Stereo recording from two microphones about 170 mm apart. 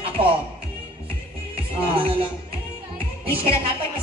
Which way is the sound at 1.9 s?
35° right (ahead or behind).